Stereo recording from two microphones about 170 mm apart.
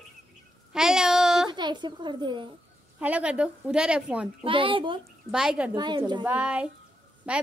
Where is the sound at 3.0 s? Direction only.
5° right (ahead or behind).